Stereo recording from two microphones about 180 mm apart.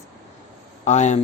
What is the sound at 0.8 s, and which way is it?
Speech, 40° left (ahead or behind).